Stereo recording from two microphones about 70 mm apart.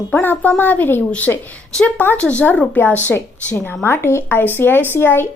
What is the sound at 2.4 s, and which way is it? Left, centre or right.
Speech, left.